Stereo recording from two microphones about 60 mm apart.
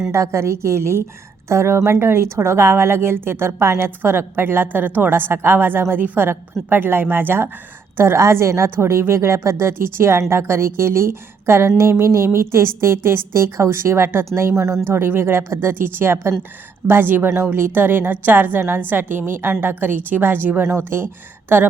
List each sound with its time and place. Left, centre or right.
0.1 s a woman's voice: right
7.9 s a woman's voice: right
20.7 s a woman's voice: right
21.5 s a woman's voice: right